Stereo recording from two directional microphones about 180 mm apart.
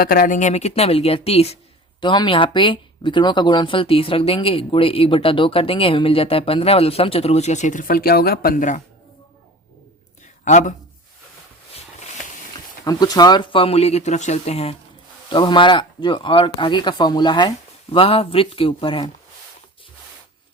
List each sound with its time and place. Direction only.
0.0 s speech: 55° left (ahead or behind)
10.4 s speech: 45° left (ahead or behind)
12.8 s speech: 20° left (ahead or behind)